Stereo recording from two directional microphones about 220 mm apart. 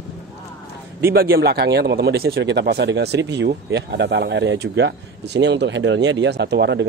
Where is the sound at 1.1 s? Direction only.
45° right (ahead or behind).